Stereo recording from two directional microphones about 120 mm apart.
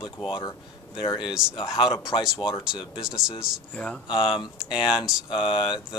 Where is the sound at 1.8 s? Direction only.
40° left (ahead or behind).